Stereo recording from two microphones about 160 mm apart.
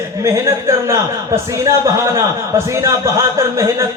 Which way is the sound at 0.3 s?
20° right (ahead or behind).